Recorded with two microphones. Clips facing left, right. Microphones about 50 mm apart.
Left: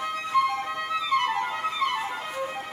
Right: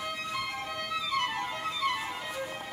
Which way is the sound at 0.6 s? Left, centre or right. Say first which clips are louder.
Left 5 dB; centre.